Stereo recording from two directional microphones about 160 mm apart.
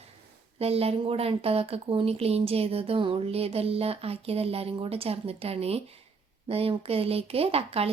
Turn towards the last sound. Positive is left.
turn(degrees=-40)  # may be behind; listen again after turning